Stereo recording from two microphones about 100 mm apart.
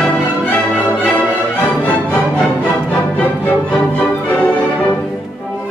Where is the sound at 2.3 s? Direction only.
15° left (ahead or behind).